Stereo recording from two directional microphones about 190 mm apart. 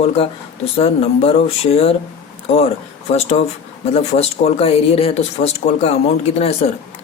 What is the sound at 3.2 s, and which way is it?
Speech, 35° left (ahead or behind).